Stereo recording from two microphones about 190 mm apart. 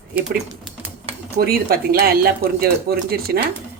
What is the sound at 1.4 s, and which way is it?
Speech, 50° right (ahead or behind).